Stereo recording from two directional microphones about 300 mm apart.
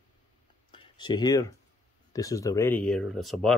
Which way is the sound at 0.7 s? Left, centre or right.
Centre.